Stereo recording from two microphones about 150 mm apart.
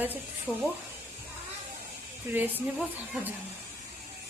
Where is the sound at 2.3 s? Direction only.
10° right (ahead or behind).